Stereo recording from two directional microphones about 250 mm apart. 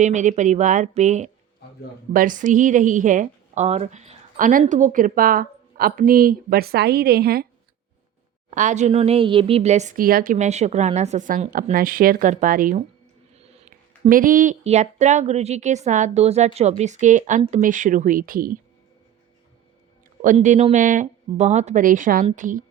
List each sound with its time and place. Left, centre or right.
0.0 s a woman's voice: right
8.4 s speech: right
20.2 s a woman's voice: right